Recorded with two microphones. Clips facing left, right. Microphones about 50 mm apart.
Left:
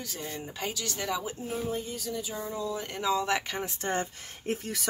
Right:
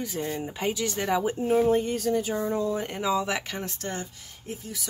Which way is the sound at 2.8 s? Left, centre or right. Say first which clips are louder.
Right 2 dB; centre.